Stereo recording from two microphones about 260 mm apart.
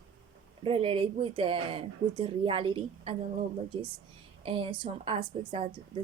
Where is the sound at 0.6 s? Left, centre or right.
Right.